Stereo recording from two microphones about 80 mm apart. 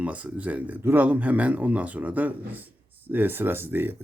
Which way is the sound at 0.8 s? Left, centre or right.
Right.